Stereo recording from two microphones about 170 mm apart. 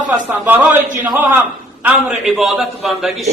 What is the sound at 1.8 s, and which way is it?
A man's voice, 5° right (ahead or behind).